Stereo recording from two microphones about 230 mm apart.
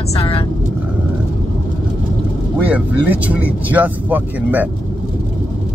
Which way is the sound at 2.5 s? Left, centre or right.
Centre.